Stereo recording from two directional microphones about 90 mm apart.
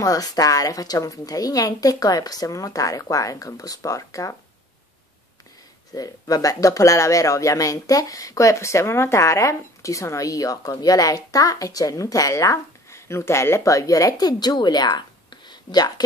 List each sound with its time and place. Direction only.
0.0 s speech: 40° left (ahead or behind)
5.9 s speech: 40° left (ahead or behind)